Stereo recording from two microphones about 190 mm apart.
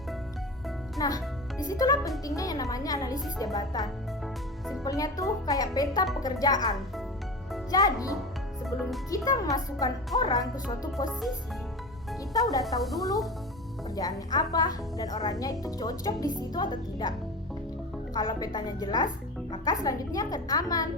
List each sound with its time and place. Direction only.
0.9 s music: 20° left (ahead or behind)
1.8 s a woman's voice: 20° left (ahead or behind)
10.9 s music: centre (ahead or behind)
12.3 s a woman's voice: 20° left (ahead or behind)
12.6 s music: centre (ahead or behind)
13.9 s a woman's voice: 20° left (ahead or behind)
18.1 s a woman's voice: 20° left (ahead or behind)